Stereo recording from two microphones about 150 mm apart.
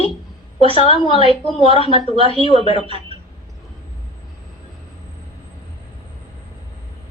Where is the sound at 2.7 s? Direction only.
40° left (ahead or behind).